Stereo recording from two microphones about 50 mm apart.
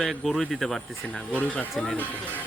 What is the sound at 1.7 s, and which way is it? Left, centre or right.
Speech, centre.